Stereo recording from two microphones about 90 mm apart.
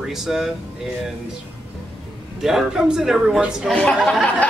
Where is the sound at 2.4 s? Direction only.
5° right (ahead or behind).